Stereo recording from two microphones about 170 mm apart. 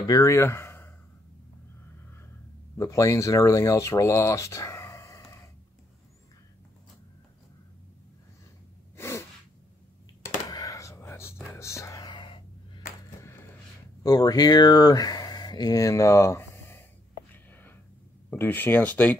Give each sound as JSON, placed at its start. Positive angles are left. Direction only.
{"t": 0.0, "sound": "speech", "side_deg": 20}
{"t": 2.8, "sound": "speech", "side_deg": 20}
{"t": 8.9, "sound": "sneeze", "side_deg": 15}
{"t": 10.5, "sound": "whispering", "side_deg": 20}
{"t": 14.0, "sound": "speech", "side_deg": 20}
{"t": 17.3, "sound": "a sound", "side_deg": 10}
{"t": 18.4, "sound": "speech", "side_deg": 10}